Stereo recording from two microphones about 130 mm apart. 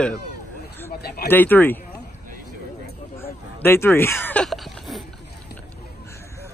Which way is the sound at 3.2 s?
20° left (ahead or behind).